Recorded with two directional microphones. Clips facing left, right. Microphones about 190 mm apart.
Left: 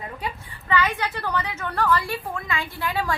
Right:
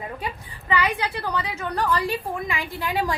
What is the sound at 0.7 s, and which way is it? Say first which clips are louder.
A woman's voice: even; 15° right (ahead or behind).